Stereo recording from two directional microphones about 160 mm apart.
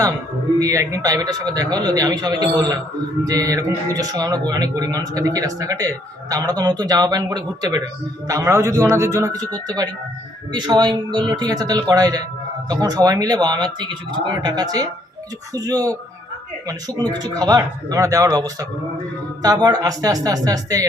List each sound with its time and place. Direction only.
0.6 s speech: 20° right (ahead or behind)